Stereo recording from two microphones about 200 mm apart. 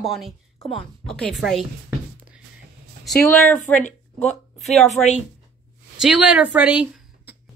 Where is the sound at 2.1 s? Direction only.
5° right (ahead or behind).